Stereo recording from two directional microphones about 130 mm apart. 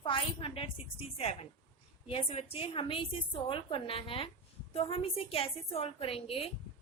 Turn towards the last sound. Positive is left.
turn(degrees=45)  # may be behind; listen again after turning